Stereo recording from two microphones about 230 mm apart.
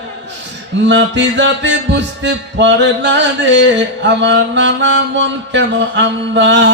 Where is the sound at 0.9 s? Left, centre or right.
Right.